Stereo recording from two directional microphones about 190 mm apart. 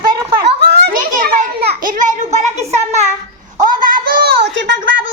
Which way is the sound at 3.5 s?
45° right (ahead or behind).